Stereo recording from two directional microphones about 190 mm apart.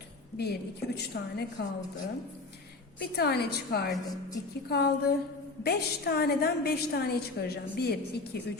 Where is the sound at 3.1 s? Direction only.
55° left (ahead or behind).